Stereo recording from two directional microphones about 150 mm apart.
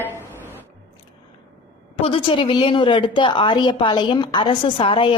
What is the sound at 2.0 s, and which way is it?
A woman's voice, 35° left (ahead or behind).